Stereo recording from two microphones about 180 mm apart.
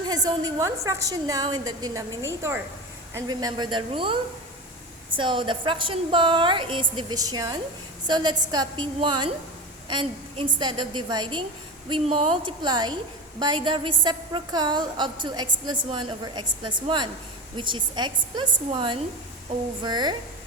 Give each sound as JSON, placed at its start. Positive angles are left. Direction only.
{"t": 0.0, "sound": "a woman's voice", "side_deg": -20}